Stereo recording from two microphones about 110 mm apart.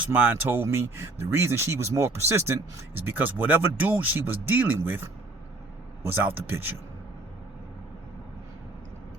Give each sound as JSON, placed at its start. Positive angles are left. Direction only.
{"t": 0.0, "sound": "speech", "side_deg": -15}